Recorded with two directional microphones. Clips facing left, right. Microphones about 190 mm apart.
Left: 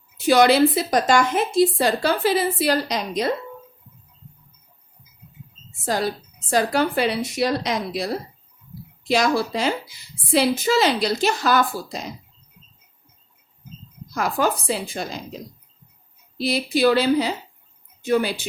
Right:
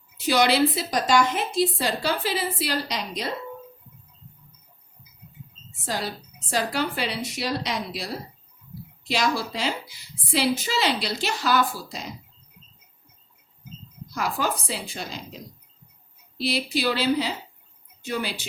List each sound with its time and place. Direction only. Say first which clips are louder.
0.3 s a woman's voice: left 5 dB; 50° left (ahead or behind)
6.5 s a woman's voice: left 6 dB; 50° left (ahead or behind)
14.1 s a woman's voice: left 5 dB; 50° left (ahead or behind)
16.4 s a woman's voice: left 6 dB; 45° left (ahead or behind)